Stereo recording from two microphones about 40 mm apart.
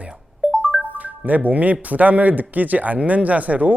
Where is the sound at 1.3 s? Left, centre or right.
Right.